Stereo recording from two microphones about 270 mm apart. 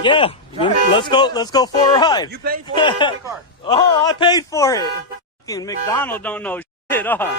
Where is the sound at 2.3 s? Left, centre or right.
Right.